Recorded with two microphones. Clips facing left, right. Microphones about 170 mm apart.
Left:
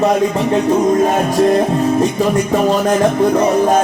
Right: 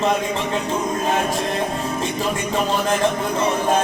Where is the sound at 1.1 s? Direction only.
40° left (ahead or behind).